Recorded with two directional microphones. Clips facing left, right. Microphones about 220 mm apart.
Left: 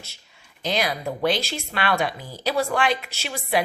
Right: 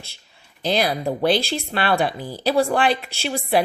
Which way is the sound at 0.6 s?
35° right (ahead or behind).